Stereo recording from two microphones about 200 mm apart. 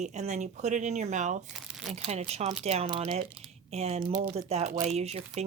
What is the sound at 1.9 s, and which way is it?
Speech, 35° right (ahead or behind).